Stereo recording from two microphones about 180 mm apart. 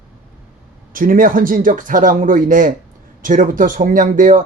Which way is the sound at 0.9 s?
50° right (ahead or behind).